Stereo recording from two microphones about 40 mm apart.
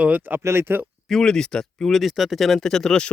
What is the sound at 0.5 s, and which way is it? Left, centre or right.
Speech, right.